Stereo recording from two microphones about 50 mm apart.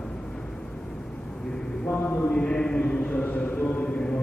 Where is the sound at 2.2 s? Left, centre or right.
Centre.